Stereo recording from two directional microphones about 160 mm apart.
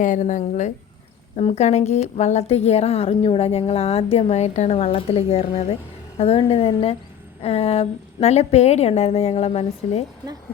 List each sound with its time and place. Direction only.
0.0 s a woman's voice: 50° left (ahead or behind)